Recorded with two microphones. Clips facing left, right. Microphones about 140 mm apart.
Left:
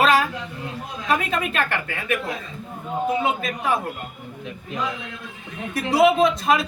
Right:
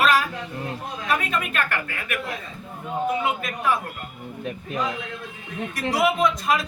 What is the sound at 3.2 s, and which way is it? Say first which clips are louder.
Speech: left 2 dB; 25° left (ahead or behind).